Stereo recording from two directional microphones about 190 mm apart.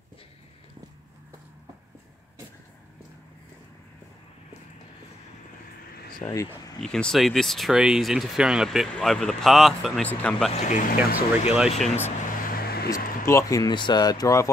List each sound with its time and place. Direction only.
6.1 s speech: 15° left (ahead or behind)
6.8 s speech: 5° left (ahead or behind)
10.5 s speech: 40° left (ahead or behind)
11.0 s speech: 5° right (ahead or behind)
12.4 s vehicle: 50° left (ahead or behind)
13.3 s speech: 15° left (ahead or behind)